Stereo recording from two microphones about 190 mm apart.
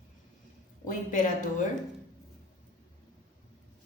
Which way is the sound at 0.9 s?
40° left (ahead or behind).